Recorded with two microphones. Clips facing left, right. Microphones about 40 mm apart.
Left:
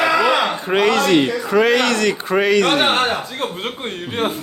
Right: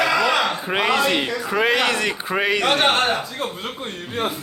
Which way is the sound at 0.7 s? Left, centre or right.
Centre.